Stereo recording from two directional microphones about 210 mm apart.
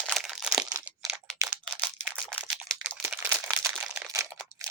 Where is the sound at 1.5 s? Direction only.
5° left (ahead or behind).